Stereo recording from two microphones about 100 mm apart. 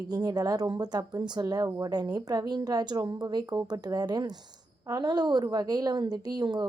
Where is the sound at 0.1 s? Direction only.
40° right (ahead or behind).